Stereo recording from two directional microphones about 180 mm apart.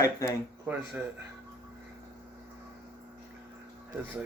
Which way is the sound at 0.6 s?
10° right (ahead or behind).